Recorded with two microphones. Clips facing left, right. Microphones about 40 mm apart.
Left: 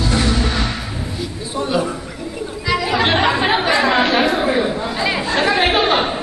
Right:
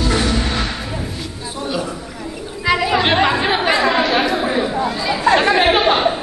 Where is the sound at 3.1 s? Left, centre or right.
Centre.